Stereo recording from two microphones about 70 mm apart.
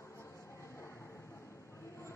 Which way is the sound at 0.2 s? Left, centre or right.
Left.